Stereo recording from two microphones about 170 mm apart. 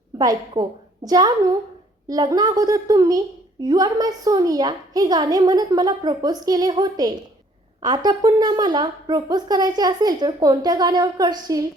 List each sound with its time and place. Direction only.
0.2 s a woman's voice: 25° right (ahead or behind)